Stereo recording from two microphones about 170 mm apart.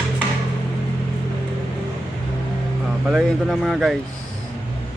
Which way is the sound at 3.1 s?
5° right (ahead or behind).